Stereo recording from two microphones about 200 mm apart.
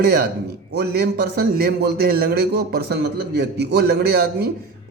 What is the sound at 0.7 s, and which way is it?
A man's voice, 50° right (ahead or behind).